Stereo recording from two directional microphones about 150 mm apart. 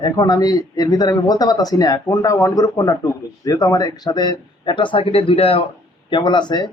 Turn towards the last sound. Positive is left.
turn(degrees=30)  # may be behind; listen again after turning